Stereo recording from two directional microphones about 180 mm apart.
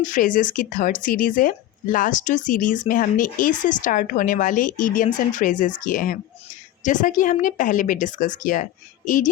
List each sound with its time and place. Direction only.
0.0 s speech: 45° left (ahead or behind)